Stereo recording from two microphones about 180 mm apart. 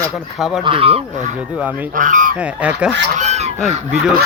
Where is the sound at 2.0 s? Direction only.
45° right (ahead or behind).